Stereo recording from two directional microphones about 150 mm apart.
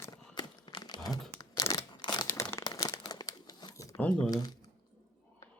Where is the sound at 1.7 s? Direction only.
30° left (ahead or behind).